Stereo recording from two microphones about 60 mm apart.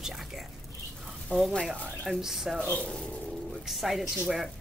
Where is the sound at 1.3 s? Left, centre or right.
Left.